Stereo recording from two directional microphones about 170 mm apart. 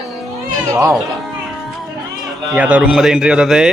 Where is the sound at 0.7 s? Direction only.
20° right (ahead or behind).